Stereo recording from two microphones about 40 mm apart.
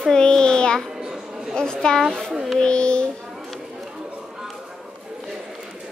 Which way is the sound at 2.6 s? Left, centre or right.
Left.